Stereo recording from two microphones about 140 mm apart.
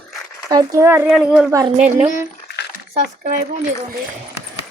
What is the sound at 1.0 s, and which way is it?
Speech, centre (ahead or behind).